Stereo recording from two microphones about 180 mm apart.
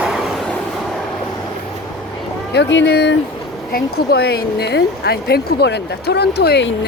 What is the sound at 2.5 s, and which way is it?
Speech, 75° left (ahead or behind).